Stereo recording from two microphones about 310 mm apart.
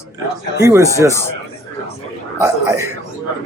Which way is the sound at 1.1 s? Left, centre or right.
Centre.